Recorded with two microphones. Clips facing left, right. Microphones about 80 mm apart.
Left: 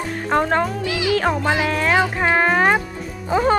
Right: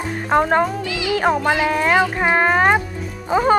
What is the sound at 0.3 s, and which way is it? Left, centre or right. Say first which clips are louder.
Speech: right 2 dB; centre.